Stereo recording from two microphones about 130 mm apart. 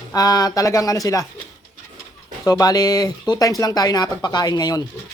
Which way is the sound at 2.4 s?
30° left (ahead or behind).